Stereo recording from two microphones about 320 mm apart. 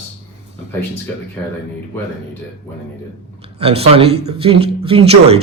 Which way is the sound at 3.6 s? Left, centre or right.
Centre.